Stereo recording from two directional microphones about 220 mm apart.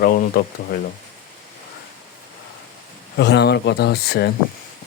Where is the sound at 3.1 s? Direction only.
50° left (ahead or behind).